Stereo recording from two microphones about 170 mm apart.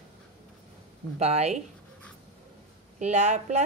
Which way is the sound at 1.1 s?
40° right (ahead or behind).